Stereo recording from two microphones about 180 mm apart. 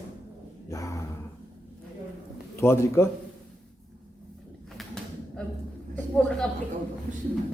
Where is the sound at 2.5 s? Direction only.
15° left (ahead or behind).